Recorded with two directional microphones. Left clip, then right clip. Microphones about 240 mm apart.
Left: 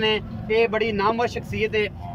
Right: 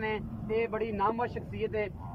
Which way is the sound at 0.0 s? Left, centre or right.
Centre.